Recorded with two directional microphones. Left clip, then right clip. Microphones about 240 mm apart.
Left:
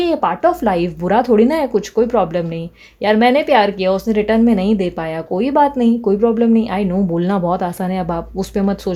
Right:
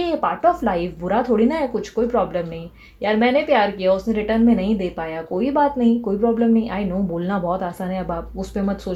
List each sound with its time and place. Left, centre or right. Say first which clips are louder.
0.0 s a woman's voice: left 4 dB; left